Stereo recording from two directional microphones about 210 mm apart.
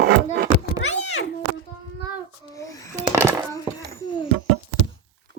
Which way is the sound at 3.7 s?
15° left (ahead or behind).